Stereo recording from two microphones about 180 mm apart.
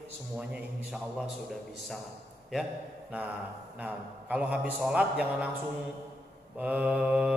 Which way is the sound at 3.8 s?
5° right (ahead or behind).